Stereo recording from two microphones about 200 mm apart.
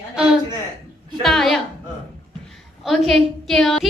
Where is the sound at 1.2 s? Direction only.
Centre (ahead or behind).